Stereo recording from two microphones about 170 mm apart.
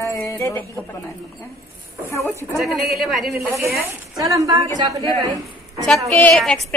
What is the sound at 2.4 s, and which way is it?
Speech, 15° right (ahead or behind).